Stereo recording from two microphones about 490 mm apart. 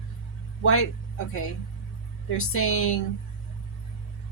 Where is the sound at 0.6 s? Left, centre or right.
Left.